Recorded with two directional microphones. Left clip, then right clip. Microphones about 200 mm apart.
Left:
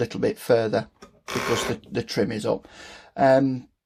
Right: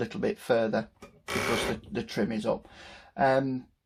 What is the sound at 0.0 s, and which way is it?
Speech, 45° left (ahead or behind).